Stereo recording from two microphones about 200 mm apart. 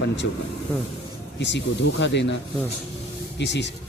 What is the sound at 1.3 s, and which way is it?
Speech, 60° left (ahead or behind).